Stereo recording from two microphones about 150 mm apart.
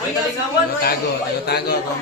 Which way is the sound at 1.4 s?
90° left.